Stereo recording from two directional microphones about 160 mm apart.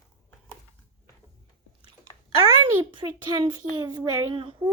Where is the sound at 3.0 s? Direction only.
25° right (ahead or behind).